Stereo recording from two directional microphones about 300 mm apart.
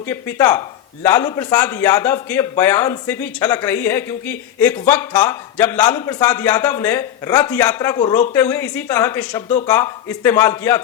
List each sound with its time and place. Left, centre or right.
0.0 s a man's voice: centre